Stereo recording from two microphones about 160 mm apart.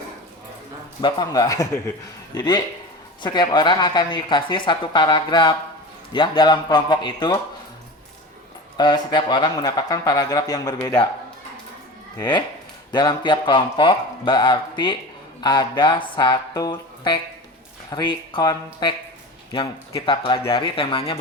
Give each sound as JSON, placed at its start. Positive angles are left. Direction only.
{"t": 1.0, "sound": "speech", "side_deg": 25}
{"t": 8.8, "sound": "speech", "side_deg": 30}
{"t": 12.9, "sound": "speech", "side_deg": 25}
{"t": 20.0, "sound": "speech", "side_deg": 30}